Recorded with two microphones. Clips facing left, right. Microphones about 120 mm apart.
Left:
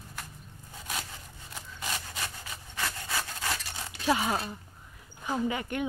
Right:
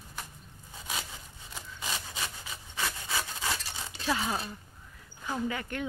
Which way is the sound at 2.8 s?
10° right (ahead or behind).